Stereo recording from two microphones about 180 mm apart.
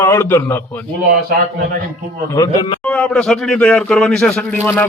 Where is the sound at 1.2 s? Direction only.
50° right (ahead or behind).